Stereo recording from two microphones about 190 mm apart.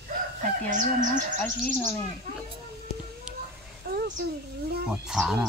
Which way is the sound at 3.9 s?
50° right (ahead or behind).